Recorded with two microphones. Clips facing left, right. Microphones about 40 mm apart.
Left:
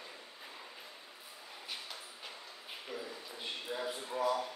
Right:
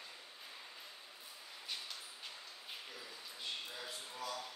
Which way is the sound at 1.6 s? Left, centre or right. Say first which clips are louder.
Left 1 dB; centre.